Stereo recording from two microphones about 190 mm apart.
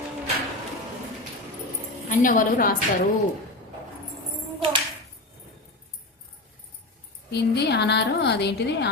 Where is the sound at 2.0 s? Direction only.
45° left (ahead or behind).